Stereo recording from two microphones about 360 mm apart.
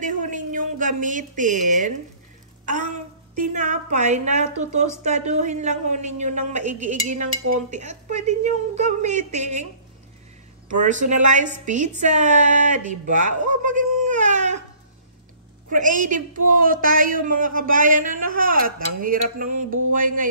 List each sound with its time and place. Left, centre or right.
0.0 s a sound: right
2.6 s a woman's voice: right
10.7 s speech: right
15.7 s speech: right